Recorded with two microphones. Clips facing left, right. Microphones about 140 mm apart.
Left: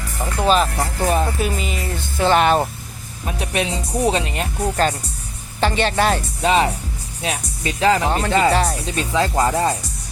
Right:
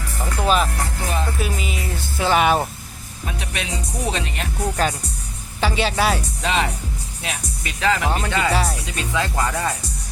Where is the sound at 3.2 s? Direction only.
35° left (ahead or behind).